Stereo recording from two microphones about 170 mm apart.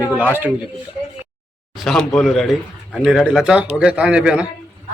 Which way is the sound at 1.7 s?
Centre (ahead or behind).